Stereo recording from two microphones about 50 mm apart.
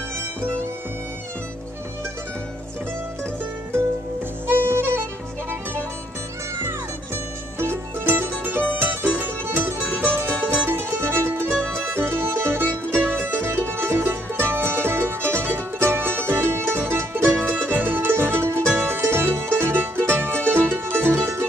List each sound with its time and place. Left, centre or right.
4.5 s harmonica: right
7.5 s music: right